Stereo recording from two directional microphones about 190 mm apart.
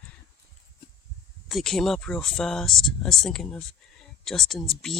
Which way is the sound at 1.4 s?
Centre (ahead or behind).